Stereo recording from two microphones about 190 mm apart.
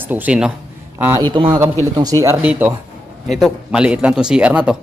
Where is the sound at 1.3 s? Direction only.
25° right (ahead or behind).